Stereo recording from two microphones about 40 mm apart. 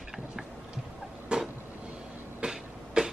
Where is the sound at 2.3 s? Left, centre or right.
Centre.